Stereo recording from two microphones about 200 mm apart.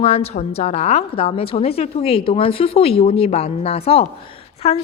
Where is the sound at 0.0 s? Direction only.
30° left (ahead or behind).